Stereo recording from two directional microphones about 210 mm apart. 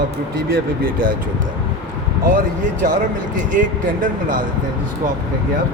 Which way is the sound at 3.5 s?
40° right (ahead or behind).